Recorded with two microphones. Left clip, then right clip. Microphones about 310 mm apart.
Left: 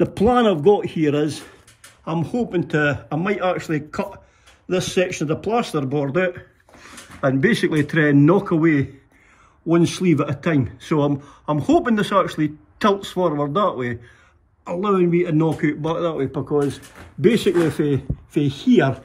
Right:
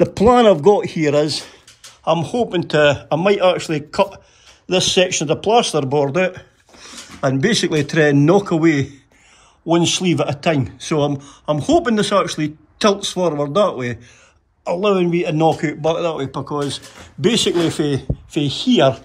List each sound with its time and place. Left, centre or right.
0.0 s speech: right; by 18.9 s centre